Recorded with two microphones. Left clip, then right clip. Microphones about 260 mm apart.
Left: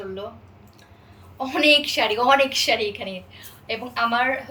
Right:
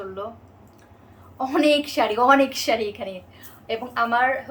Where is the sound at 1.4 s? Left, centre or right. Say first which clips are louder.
Left 2 dB; centre.